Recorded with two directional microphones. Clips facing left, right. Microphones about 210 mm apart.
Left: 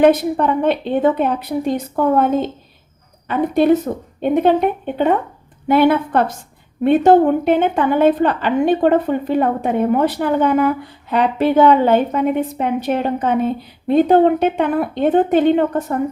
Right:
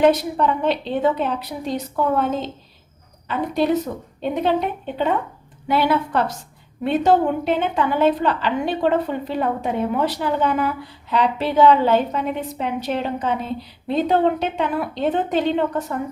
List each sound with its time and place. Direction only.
0.0 s a woman's voice: 55° left (ahead or behind)